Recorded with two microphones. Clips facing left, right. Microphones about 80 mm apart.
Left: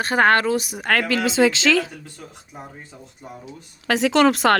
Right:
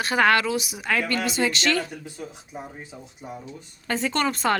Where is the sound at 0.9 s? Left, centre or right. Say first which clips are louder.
Left 4 dB; left.